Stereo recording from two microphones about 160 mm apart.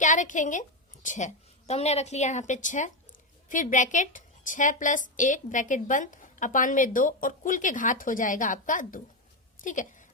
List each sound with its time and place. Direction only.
0.0 s a woman's voice: 50° left (ahead or behind)